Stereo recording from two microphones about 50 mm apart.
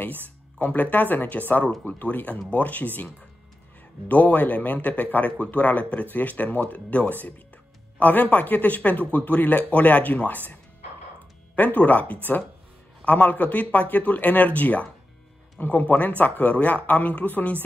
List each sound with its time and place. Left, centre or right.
0.6 s a man's voice: left